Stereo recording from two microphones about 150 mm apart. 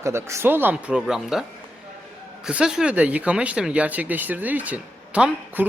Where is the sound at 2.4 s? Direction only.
5° right (ahead or behind).